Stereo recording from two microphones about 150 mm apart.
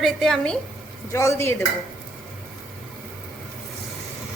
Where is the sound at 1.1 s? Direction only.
20° left (ahead or behind).